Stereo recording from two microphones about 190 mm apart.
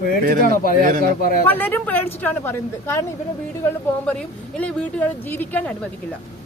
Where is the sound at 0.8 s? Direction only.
45° right (ahead or behind).